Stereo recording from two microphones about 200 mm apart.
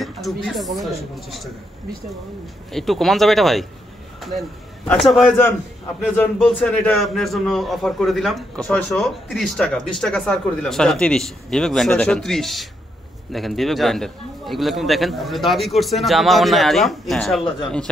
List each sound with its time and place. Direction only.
0.0 s a man's voice: centre (ahead or behind)
2.7 s a man's voice: centre (ahead or behind)